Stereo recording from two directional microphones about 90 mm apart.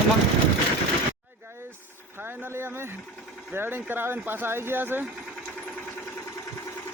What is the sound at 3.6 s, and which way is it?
Speech, 25° right (ahead or behind).